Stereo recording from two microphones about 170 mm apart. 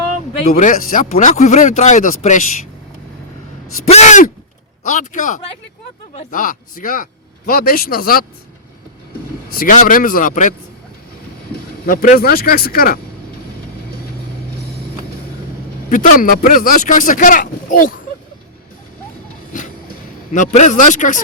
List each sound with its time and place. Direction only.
0.4 s speech: 45° left (ahead or behind)
3.8 s speech: 40° left (ahead or behind); by 8.2 s 60° left (ahead or behind)
9.5 s speech: 55° left (ahead or behind)
11.9 s speech: 55° left (ahead or behind)
15.9 s speech: 50° left (ahead or behind)
20.3 s speech: 45° left (ahead or behind)